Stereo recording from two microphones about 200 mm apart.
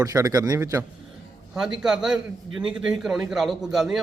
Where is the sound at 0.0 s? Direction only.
15° right (ahead or behind).